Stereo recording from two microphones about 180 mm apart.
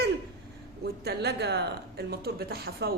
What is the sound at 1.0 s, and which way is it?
A man's voice, 65° right (ahead or behind).